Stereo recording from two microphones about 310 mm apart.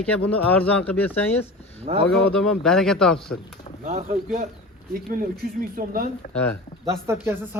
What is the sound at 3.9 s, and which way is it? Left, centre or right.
Speech, right.